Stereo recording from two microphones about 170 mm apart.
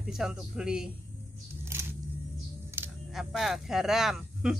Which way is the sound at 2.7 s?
15° right (ahead or behind).